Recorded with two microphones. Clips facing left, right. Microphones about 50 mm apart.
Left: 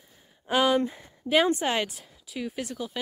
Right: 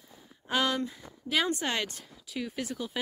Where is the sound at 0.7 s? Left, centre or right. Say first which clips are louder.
Left 8 dB; left.